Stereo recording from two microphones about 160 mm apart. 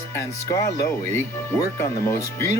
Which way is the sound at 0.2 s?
20° left (ahead or behind).